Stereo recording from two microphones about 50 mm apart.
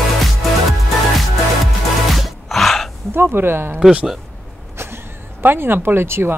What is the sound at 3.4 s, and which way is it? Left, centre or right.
Speech, right.